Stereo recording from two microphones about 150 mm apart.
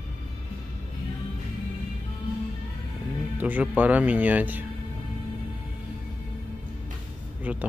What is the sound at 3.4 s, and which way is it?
Speech, 10° right (ahead or behind).